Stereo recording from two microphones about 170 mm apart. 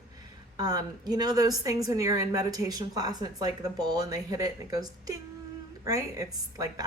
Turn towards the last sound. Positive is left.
turn(degrees=-20)  # may be behind; listen again after turning